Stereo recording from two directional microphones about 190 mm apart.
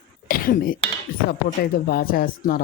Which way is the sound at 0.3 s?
50° left (ahead or behind).